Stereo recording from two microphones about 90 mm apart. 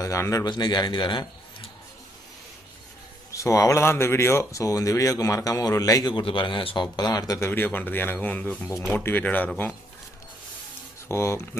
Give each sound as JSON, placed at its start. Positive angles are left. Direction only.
{"t": 0.0, "sound": "speech", "side_deg": 35}
{"t": 0.4, "sound": "speech", "side_deg": 55}
{"t": 3.3, "sound": "speech", "side_deg": 35}
{"t": 6.1, "sound": "a man's voice", "side_deg": 70}
{"t": 6.8, "sound": "speech", "side_deg": 50}
{"t": 7.3, "sound": "speech", "side_deg": 25}
{"t": 11.1, "sound": "speech", "side_deg": 30}